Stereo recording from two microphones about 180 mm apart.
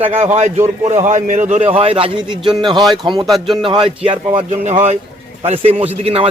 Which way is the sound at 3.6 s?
25° right (ahead or behind).